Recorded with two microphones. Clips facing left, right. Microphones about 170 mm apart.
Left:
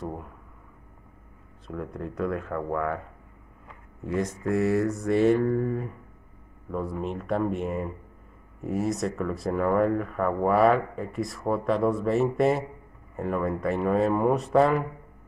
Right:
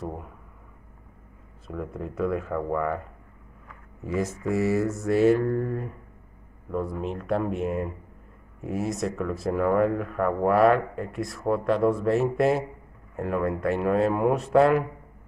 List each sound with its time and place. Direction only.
1.7 s speech: centre (ahead or behind)
4.0 s speech: 5° right (ahead or behind)